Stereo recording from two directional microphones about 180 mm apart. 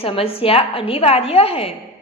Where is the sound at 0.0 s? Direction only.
30° left (ahead or behind).